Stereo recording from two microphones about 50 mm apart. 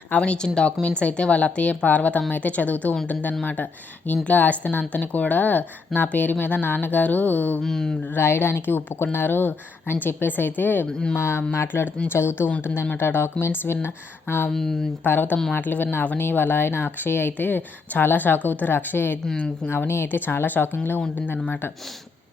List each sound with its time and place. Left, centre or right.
0.2 s a woman's voice: centre; by 7.6 s left
7.6 s a sound: centre
8.1 s a woman's voice: left
11.1 s a woman's voice: left